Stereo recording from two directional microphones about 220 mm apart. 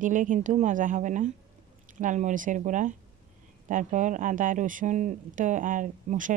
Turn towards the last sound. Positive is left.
turn(degrees=-35)  # may be behind; listen again after turning